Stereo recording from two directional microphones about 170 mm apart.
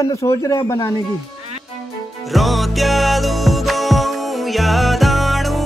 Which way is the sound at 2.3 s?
Centre (ahead or behind).